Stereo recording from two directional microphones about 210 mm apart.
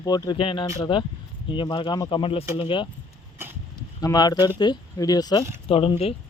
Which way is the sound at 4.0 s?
20° left (ahead or behind).